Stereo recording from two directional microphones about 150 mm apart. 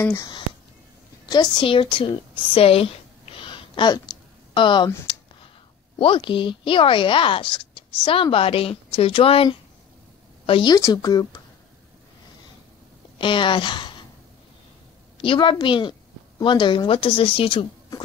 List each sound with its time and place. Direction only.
0.0 s a woman's voice: 20° left (ahead or behind)
1.2 s a sound: 30° left (ahead or behind)
5.9 s a woman's voice: 35° left (ahead or behind)
13.2 s a woman's voice: 35° left (ahead or behind)
15.2 s a woman's voice: 35° left (ahead or behind)